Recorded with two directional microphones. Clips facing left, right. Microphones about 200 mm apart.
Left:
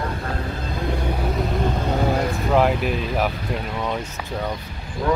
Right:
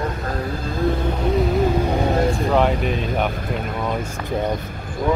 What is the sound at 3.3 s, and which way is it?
Vehicle, 50° right (ahead or behind).